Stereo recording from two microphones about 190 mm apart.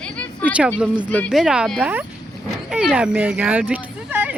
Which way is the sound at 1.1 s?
5° left (ahead or behind).